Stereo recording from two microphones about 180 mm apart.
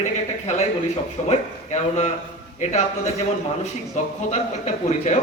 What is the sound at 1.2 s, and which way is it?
A man's voice, 40° left (ahead or behind).